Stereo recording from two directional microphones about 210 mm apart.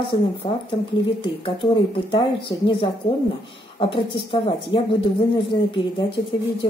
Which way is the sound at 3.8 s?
25° left (ahead or behind).